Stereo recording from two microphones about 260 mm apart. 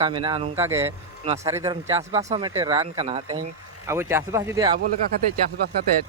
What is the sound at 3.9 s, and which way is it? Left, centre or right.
Speech, centre.